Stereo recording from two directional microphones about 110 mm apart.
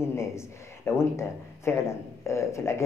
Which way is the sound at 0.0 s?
25° left (ahead or behind).